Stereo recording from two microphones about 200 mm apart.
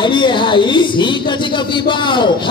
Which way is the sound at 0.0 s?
25° left (ahead or behind).